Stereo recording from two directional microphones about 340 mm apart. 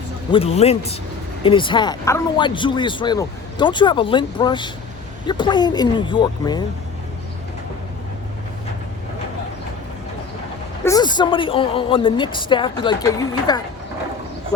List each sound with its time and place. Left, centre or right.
0.3 s speech: centre
10.8 s speech: centre